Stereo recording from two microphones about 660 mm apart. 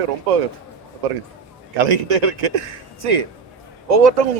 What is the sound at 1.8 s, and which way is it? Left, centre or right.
A man's voice, right.